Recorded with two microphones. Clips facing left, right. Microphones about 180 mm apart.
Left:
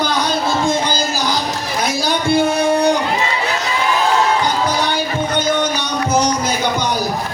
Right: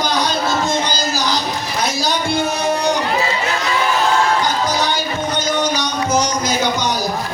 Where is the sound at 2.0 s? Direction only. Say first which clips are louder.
Left 4 dB; 55° left (ahead or behind).